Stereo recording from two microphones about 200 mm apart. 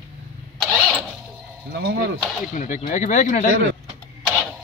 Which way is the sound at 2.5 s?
40° left (ahead or behind).